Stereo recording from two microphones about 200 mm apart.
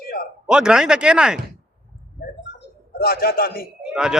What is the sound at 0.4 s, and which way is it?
Speech, 5° right (ahead or behind).